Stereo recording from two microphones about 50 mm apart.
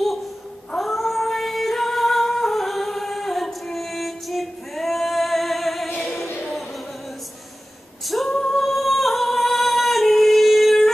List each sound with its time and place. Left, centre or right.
0.7 s singing: centre
5.9 s music: left
8.3 s singing: centre